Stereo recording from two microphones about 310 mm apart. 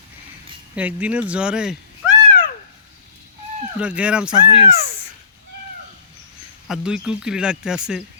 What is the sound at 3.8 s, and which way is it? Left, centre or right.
Speech, centre.